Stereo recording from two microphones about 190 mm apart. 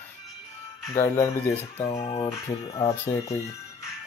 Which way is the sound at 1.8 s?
30° left (ahead or behind).